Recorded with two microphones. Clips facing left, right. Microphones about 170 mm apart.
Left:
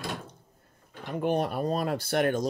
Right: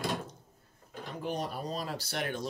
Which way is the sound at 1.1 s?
60° left (ahead or behind).